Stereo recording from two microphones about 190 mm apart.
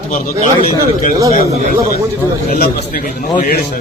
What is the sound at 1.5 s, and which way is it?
Speech, 35° right (ahead or behind).